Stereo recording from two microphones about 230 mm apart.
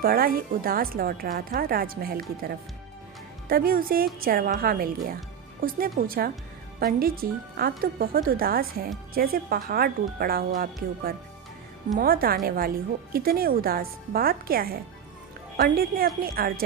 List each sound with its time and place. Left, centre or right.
0.0 s a woman's voice: right
3.5 s a woman's voice: right